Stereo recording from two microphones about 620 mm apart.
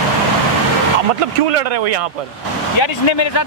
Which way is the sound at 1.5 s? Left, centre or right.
Right.